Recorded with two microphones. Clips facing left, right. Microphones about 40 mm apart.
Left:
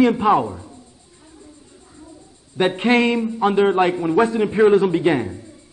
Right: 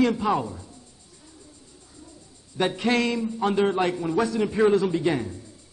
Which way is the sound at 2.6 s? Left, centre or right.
Left.